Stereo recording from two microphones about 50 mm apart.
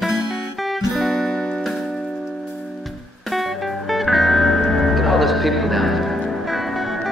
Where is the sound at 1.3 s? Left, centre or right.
Centre.